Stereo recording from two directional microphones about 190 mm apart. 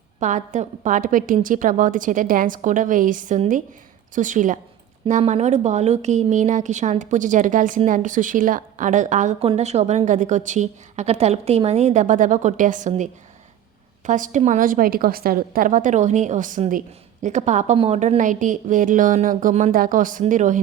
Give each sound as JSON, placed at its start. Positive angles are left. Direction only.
{"t": 0.2, "sound": "a woman's voice", "side_deg": -40}
{"t": 14.1, "sound": "a woman's voice", "side_deg": -40}